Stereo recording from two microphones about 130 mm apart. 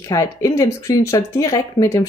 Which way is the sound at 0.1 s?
25° left (ahead or behind).